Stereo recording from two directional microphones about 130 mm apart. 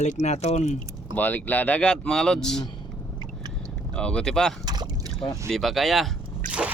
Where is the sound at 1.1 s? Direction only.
15° left (ahead or behind).